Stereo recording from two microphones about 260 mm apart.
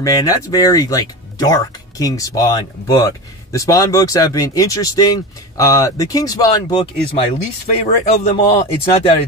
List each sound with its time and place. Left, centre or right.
0.0 s a man's voice: centre